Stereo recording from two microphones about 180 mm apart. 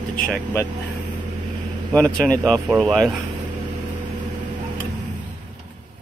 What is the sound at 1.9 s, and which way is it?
Speech, 5° left (ahead or behind).